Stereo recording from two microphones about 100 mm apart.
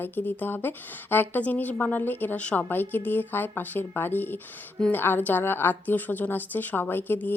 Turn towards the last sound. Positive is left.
turn(degrees=20)  # may be behind; listen again after turning